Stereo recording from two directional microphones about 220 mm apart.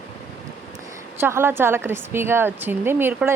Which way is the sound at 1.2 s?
10° right (ahead or behind).